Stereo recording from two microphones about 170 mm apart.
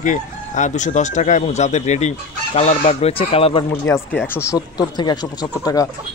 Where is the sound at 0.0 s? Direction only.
45° left (ahead or behind).